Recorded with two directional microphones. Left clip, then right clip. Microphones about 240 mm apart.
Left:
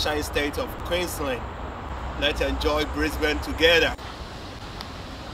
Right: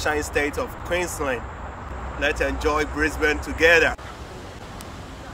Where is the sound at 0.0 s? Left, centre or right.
Centre.